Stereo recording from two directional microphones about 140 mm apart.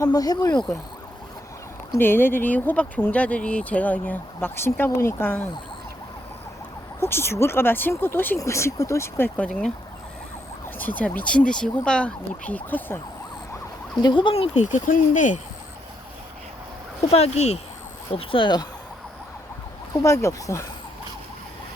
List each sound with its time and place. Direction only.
0.0 s speech: 25° left (ahead or behind)
2.0 s speech: 15° left (ahead or behind)
7.0 s speech: 15° left (ahead or behind)
9.5 s speech: centre (ahead or behind)
10.8 s speech: 10° left (ahead or behind)
14.0 s speech: 35° left (ahead or behind)
14.5 s speech: 60° left (ahead or behind)
17.0 s speech: 45° left (ahead or behind)
19.9 s speech: 25° left (ahead or behind)